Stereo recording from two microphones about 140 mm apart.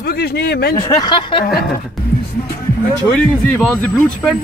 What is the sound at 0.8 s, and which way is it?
Speech, 30° left (ahead or behind).